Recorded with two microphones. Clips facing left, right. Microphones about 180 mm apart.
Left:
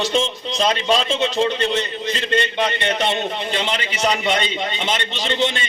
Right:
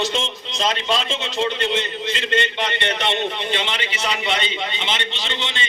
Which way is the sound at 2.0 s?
40° left (ahead or behind).